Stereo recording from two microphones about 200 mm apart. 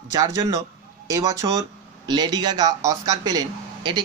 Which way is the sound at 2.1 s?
20° right (ahead or behind).